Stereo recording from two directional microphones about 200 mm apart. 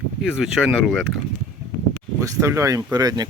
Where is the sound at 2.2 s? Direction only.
15° right (ahead or behind).